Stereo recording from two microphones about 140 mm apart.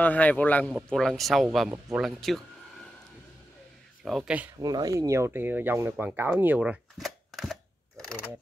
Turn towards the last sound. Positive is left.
turn(degrees=0)  # may be behind; listen again after turning